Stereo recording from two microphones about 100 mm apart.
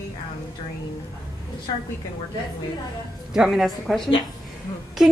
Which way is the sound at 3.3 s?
5° right (ahead or behind).